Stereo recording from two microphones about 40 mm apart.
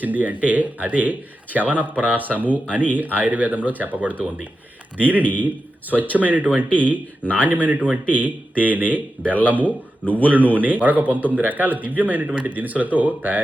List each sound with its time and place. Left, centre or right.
0.0 s speech: right